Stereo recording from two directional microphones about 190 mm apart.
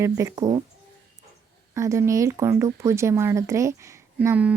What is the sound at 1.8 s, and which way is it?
Speech, 15° right (ahead or behind).